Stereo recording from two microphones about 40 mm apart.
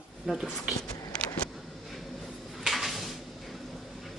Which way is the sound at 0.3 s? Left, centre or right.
Centre.